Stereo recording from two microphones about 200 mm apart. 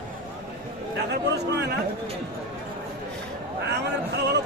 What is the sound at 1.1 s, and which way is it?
Speech, 55° right (ahead or behind).